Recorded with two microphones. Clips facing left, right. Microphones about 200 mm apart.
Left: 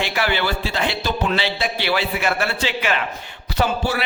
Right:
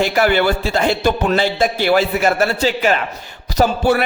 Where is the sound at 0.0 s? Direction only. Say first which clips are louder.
Right 7 dB; 45° right (ahead or behind).